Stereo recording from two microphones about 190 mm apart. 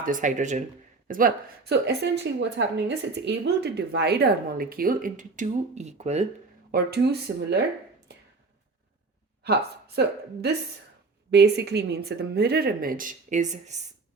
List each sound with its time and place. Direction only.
0.0 s speech: 45° right (ahead or behind)
6.7 s speech: 55° right (ahead or behind)
9.4 s speech: 60° right (ahead or behind); by 13.8 s 40° right (ahead or behind)